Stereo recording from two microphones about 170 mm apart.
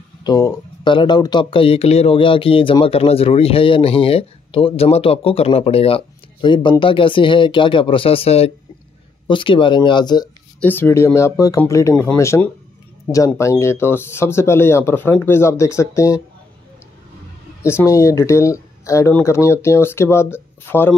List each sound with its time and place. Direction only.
0.2 s speech: 25° left (ahead or behind)
10.6 s speech: 10° left (ahead or behind)
17.6 s speech: 15° left (ahead or behind)